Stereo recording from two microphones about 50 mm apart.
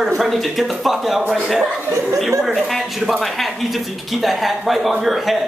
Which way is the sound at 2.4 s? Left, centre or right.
Centre.